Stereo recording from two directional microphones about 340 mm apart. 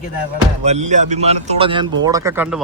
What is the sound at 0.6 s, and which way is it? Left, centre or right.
Speech, centre.